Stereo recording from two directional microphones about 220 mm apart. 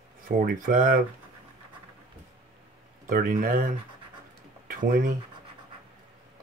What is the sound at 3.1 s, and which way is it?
Speech, 40° right (ahead or behind).